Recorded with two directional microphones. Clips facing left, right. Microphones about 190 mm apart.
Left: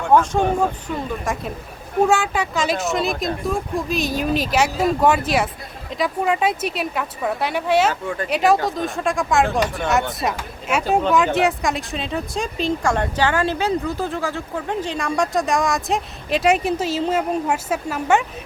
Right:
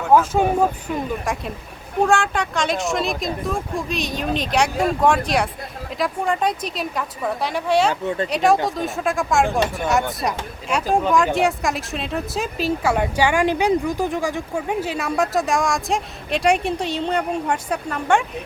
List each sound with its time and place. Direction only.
0.0 s speech: 5° right (ahead or behind)
8.0 s speech: 25° right (ahead or behind)
8.3 s speech: centre (ahead or behind)